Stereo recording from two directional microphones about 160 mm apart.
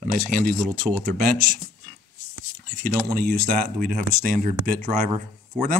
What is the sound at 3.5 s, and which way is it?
Speech, 60° right (ahead or behind).